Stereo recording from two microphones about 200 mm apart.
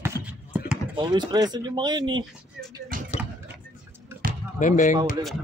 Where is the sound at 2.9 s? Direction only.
45° right (ahead or behind).